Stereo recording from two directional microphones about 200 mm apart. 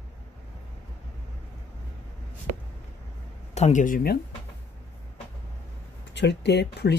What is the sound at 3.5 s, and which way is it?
Speech, 35° left (ahead or behind).